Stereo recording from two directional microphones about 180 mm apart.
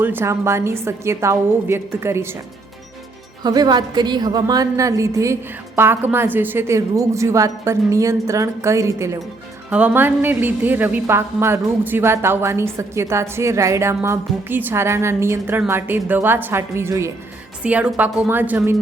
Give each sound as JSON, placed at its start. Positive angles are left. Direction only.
{"t": 0.0, "sound": "a woman's voice", "side_deg": -10}
{"t": 3.4, "sound": "a woman's voice", "side_deg": -20}